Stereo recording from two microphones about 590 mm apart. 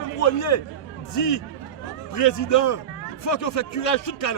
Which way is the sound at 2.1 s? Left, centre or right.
Left.